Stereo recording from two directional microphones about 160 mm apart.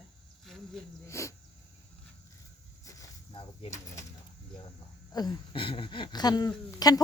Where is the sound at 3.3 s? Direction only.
35° left (ahead or behind).